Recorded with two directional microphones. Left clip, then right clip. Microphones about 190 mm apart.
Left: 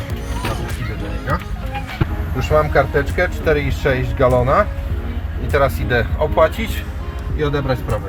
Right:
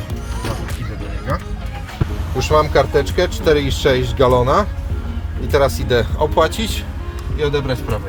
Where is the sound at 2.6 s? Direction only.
35° right (ahead or behind).